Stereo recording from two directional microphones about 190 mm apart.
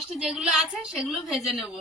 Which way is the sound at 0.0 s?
5° right (ahead or behind).